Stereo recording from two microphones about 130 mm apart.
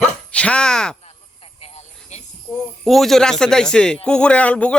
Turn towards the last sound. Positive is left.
turn(degrees=10)  # may be behind; listen again after turning